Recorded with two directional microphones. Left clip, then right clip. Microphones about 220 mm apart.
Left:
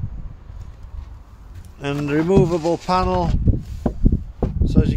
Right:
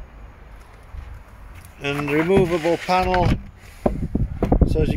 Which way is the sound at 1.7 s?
10° left (ahead or behind).